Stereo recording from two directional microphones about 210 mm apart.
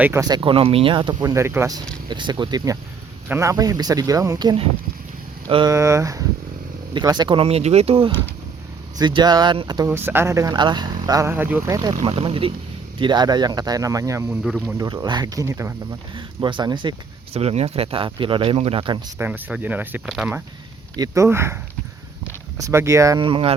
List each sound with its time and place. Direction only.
0.0 s speech: 15° right (ahead or behind)
14.4 s speech: centre (ahead or behind)
14.8 s speech: 20° right (ahead or behind)
19.2 s speech: 5° right (ahead or behind)
20.9 s speech: 15° right (ahead or behind)